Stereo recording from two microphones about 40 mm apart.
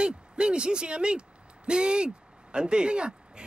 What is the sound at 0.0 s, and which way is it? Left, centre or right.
Speech, right.